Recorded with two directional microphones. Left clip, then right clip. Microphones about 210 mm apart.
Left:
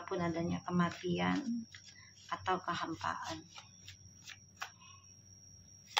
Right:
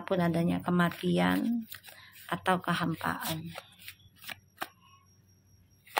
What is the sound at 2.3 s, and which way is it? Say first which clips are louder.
Speech: right 6 dB; 50° right (ahead or behind).